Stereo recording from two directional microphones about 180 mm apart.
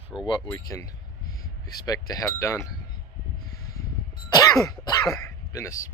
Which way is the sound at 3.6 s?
20° left (ahead or behind).